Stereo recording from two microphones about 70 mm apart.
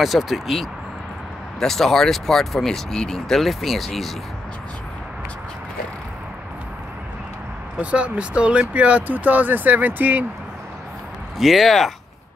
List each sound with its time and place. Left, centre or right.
0.0 s speech: centre
7.8 s speech: centre
11.3 s speech: centre